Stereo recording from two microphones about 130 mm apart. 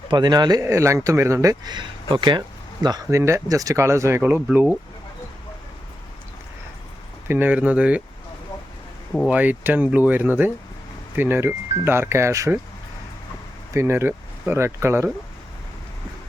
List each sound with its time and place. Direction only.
0.1 s speech: 35° right (ahead or behind); by 4.6 s 10° right (ahead or behind)
7.3 s speech: 15° right (ahead or behind)
9.2 s speech: 10° right (ahead or behind)
13.7 s speech: 20° right (ahead or behind)